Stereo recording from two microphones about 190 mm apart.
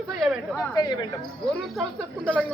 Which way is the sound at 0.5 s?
20° left (ahead or behind).